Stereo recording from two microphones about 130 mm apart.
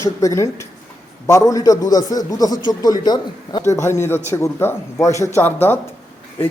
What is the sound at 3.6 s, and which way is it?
A man's voice, 20° left (ahead or behind).